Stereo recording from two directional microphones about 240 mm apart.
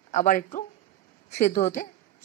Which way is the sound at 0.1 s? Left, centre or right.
Left.